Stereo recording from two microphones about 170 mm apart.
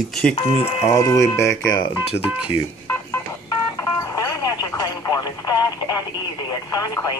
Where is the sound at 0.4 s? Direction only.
35° left (ahead or behind).